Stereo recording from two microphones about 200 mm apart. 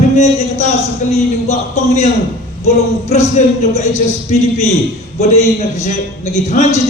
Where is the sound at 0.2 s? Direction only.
35° left (ahead or behind).